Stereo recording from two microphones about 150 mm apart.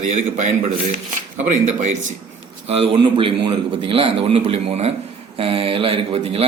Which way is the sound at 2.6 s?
40° right (ahead or behind).